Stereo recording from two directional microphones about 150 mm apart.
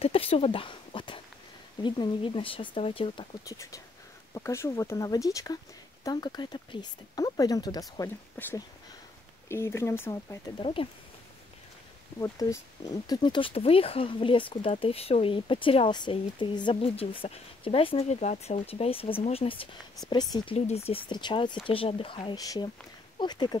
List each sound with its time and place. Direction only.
0.0 s speech: 40° left (ahead or behind)
3.4 s speech: 20° left (ahead or behind)
8.4 s speech: 10° left (ahead or behind)
10.6 s speech: 35° left (ahead or behind)
12.2 s speech: 20° left (ahead or behind)
20.5 s speech: 45° left (ahead or behind)
21.1 s speech: 30° left (ahead or behind)